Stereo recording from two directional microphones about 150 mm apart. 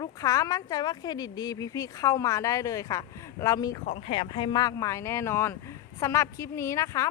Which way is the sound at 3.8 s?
40° left (ahead or behind).